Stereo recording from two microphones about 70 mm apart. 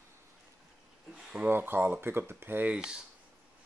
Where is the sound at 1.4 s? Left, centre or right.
Right.